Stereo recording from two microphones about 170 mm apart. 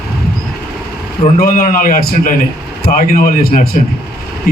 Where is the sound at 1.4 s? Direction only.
55° left (ahead or behind).